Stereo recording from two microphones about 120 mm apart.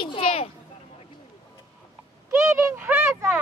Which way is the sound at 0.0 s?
45° left (ahead or behind).